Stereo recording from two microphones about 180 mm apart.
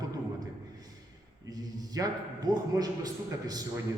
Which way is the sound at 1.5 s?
20° right (ahead or behind).